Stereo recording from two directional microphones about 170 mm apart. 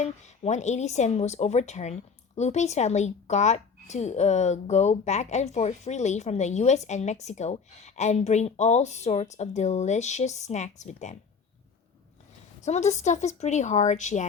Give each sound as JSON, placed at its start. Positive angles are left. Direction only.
{"t": 0.0, "sound": "speech", "side_deg": 40}
{"t": 12.6, "sound": "speech", "side_deg": 40}